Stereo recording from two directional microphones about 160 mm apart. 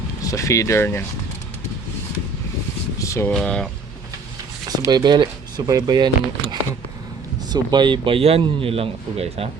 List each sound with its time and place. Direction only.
0.3 s speech: 20° left (ahead or behind)
3.0 s speech: 20° left (ahead or behind)
3.3 s speech: 5° left (ahead or behind)
4.9 s speech: 25° right (ahead or behind)